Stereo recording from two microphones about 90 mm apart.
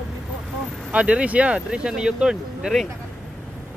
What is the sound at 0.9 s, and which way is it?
Speech, 15° right (ahead or behind).